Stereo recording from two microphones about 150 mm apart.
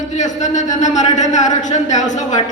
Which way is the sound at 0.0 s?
55° left (ahead or behind).